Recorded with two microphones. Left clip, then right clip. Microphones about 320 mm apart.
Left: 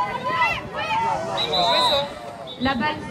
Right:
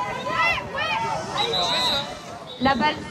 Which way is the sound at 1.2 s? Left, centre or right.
Left.